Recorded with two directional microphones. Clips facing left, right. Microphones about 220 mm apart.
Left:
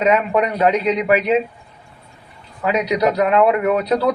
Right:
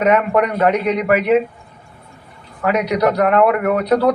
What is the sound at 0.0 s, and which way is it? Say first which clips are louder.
Speech: right 2 dB; 60° right (ahead or behind).